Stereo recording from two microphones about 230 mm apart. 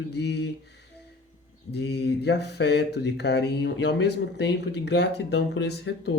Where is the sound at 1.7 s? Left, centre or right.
Left.